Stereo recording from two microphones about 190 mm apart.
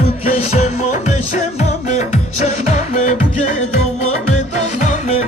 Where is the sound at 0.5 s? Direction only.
35° left (ahead or behind).